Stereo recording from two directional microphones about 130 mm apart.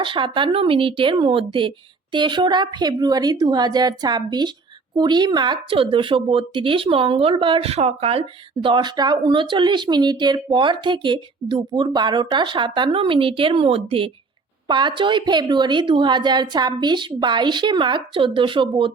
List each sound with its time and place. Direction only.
0.0 s speech: 40° right (ahead or behind)
8.6 s speech: 35° right (ahead or behind)